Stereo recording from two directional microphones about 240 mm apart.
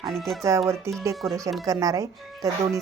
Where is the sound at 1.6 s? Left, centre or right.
Centre.